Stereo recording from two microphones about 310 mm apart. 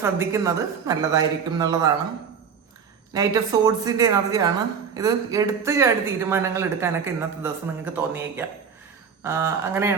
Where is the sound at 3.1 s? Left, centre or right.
Centre.